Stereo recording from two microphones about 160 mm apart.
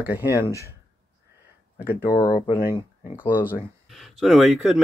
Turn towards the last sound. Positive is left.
turn(degrees=0)  # may be behind; listen again after turning